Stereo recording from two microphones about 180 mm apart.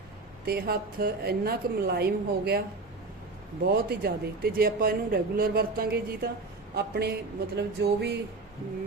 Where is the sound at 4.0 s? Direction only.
55° right (ahead or behind).